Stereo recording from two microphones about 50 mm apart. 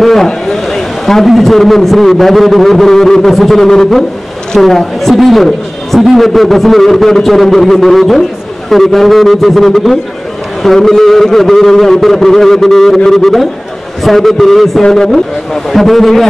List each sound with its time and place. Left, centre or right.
0.0 s a man's voice: centre